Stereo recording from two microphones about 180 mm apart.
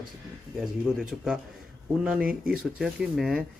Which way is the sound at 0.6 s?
5° right (ahead or behind).